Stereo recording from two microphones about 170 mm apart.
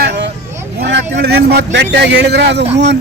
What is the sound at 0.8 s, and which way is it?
A man's voice, 80° right.